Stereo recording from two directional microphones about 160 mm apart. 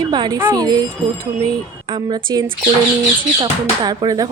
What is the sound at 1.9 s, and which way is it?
A woman's voice, 30° right (ahead or behind).